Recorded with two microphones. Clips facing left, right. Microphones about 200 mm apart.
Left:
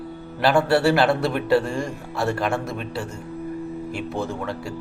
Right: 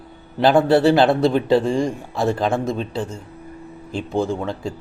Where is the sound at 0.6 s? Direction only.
20° right (ahead or behind).